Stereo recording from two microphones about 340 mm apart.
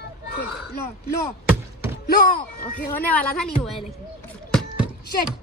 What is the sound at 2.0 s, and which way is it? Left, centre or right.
Speech, left.